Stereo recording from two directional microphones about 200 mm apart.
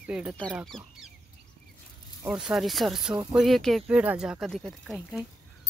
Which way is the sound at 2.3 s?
5° right (ahead or behind).